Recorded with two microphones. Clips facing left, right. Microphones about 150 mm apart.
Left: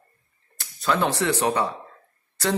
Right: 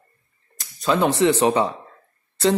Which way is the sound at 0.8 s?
20° right (ahead or behind).